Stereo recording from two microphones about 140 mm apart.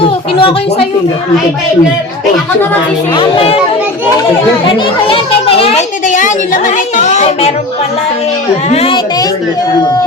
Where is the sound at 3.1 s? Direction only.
40° left (ahead or behind).